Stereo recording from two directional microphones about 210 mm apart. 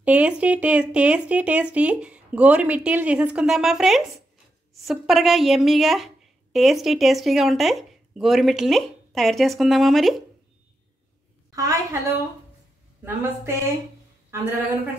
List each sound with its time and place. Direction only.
0.0 s a woman's voice: 5° right (ahead or behind)
11.5 s speech: 15° right (ahead or behind)